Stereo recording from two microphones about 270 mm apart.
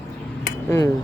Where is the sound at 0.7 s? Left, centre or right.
Centre.